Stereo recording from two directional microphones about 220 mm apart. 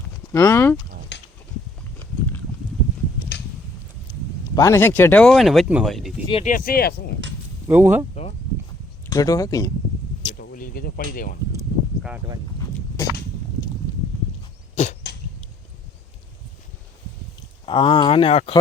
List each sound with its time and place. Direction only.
0.3 s speech: 10° left (ahead or behind)
1.1 s a sound: 50° left (ahead or behind)
3.3 s a sound: 50° left (ahead or behind)
4.5 s speech: 15° left (ahead or behind)
6.2 s speech: 25° left (ahead or behind)
6.5 s speech: 40° left (ahead or behind)
7.7 s speech: 10° right (ahead or behind)
9.0 s speech: 15° left (ahead or behind)
10.3 s speech: 45° left (ahead or behind)
12.0 s speech: 5° right (ahead or behind)
13.0 s speech: 10° left (ahead or behind)
14.8 s cough: 30° left (ahead or behind)
17.7 s speech: 25° left (ahead or behind)